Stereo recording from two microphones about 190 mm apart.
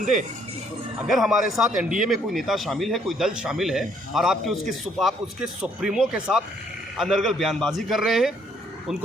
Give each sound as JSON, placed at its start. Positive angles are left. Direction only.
{"t": 0.0, "sound": "speech", "side_deg": -40}
{"t": 1.0, "sound": "a man's voice", "side_deg": 0}